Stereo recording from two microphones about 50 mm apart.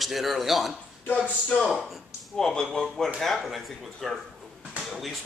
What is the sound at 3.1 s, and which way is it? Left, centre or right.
Speech, centre.